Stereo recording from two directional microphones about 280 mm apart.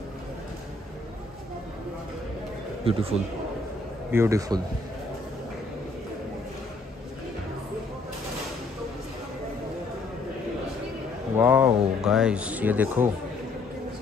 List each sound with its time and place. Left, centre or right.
2.8 s speech: centre
4.1 s a man's voice: centre
11.3 s speech: centre